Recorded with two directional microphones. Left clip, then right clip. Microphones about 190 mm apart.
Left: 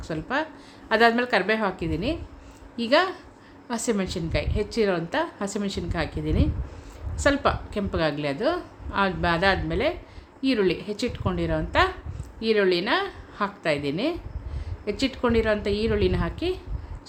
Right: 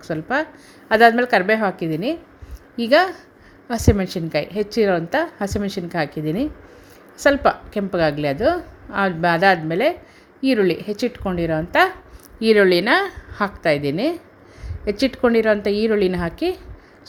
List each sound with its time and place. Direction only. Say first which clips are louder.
0.1 s a woman's voice: right 6 dB; 20° right (ahead or behind)
12.4 s a woman's voice: right 7 dB; 40° right (ahead or behind)